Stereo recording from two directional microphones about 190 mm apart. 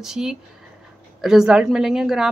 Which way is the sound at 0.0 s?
Centre (ahead or behind).